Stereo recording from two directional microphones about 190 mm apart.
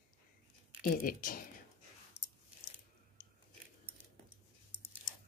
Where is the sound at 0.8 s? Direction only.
50° left (ahead or behind).